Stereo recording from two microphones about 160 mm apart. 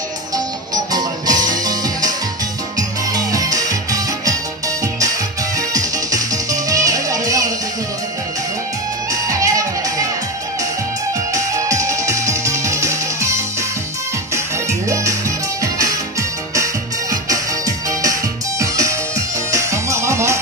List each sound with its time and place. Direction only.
0.3 s music: 25° right (ahead or behind)
5.5 s music: 20° right (ahead or behind)
9.2 s music: 20° right (ahead or behind)
11.3 s music: 20° right (ahead or behind)
17.1 s music: 20° right (ahead or behind)